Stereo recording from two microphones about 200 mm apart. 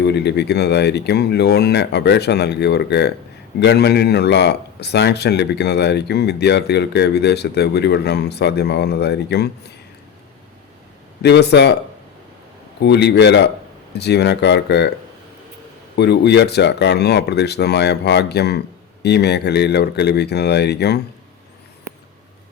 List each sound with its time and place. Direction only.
0.0 s speech: 55° left (ahead or behind)
11.2 s speech: 55° left (ahead or behind)
12.8 s speech: 55° left (ahead or behind)
16.0 s speech: 55° left (ahead or behind)